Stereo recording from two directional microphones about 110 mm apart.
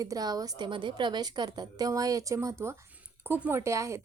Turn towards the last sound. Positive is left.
turn(degrees=-25)  # may be behind; listen again after turning